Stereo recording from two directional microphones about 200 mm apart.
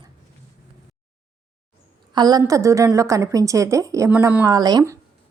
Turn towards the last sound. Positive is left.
turn(degrees=-15)  # may be behind; listen again after turning